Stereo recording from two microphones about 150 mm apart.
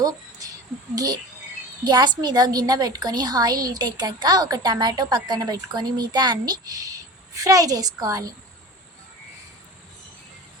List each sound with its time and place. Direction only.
0.0 s a woman's voice: 25° right (ahead or behind)